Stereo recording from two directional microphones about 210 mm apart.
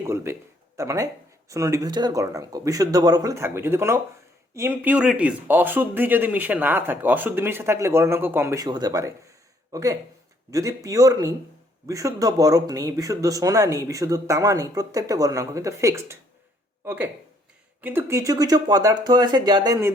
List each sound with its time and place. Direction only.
0.0 s a man's voice: 10° right (ahead or behind)